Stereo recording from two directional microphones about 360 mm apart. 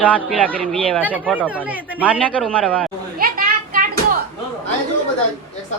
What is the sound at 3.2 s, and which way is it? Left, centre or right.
Children playing, right.